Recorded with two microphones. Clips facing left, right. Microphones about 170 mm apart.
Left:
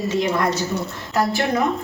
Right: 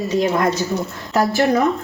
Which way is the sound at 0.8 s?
Centre (ahead or behind).